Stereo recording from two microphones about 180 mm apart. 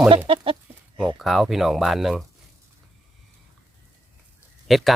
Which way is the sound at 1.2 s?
Centre (ahead or behind).